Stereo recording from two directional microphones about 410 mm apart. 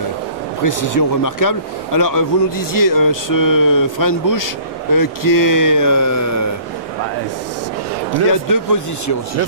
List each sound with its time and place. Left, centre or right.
0.7 s speech: left
8.1 s speech: left